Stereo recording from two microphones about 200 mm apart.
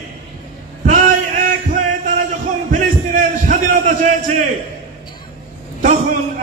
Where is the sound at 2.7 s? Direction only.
40° right (ahead or behind).